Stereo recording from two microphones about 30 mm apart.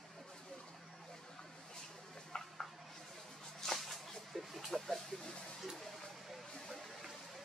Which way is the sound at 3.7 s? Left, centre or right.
Centre.